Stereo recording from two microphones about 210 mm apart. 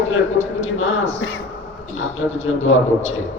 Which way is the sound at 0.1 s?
70° left (ahead or behind).